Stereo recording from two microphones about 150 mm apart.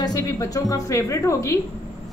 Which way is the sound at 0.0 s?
25° left (ahead or behind).